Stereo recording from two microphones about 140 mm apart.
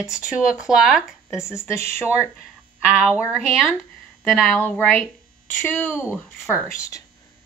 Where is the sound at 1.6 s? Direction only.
20° left (ahead or behind).